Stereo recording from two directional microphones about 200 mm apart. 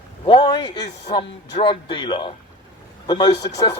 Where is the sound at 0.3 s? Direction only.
20° left (ahead or behind).